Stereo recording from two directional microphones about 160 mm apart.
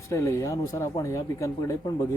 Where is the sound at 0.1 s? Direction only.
20° left (ahead or behind).